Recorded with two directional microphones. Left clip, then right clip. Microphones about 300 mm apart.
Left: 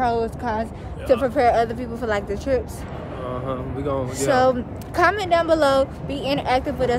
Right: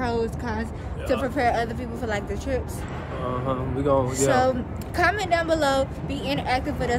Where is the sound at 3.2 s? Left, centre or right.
Centre.